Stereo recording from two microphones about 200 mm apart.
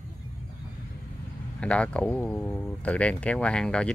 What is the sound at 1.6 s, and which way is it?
Speech, 5° left (ahead or behind).